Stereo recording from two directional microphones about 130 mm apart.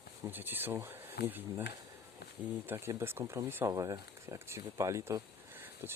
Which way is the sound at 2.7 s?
20° right (ahead or behind).